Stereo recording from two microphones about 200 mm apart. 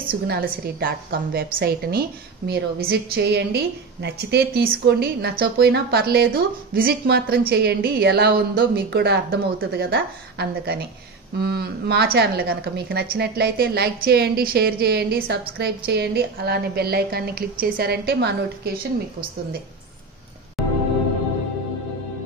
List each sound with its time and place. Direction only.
0.0 s a woman's voice: 50° right (ahead or behind)
20.6 s music: centre (ahead or behind)